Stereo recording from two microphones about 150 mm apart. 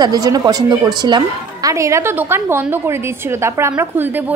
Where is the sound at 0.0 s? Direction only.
25° right (ahead or behind).